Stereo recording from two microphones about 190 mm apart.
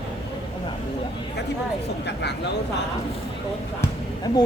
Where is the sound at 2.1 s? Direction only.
65° left (ahead or behind).